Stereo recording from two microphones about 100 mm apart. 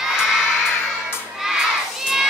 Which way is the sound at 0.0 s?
5° right (ahead or behind).